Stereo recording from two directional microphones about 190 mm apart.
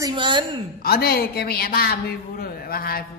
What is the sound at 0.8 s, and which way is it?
A man's voice, 55° left (ahead or behind).